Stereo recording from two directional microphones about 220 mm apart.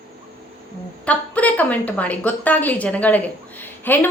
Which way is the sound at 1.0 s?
5° left (ahead or behind).